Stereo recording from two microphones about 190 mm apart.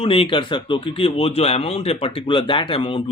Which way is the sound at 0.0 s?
30° left (ahead or behind).